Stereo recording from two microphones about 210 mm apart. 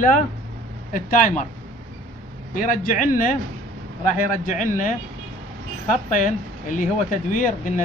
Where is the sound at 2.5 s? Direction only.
40° left (ahead or behind).